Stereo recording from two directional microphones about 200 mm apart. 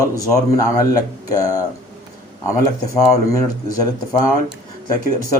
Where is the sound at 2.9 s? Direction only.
15° left (ahead or behind).